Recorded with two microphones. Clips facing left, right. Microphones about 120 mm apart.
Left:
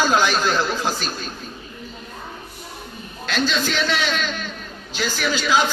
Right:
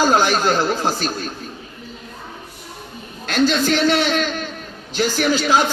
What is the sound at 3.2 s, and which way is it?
A man's voice, 50° right (ahead or behind).